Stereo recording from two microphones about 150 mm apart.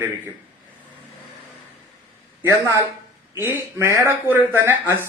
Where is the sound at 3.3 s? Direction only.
15° right (ahead or behind).